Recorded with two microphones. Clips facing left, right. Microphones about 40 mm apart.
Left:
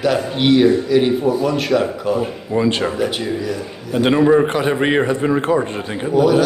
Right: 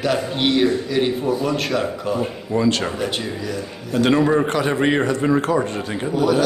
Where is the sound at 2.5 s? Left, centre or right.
Centre.